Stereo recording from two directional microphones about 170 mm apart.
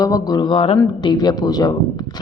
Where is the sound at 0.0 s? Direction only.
20° left (ahead or behind).